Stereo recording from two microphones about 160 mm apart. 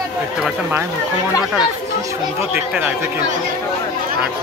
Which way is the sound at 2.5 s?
10° right (ahead or behind).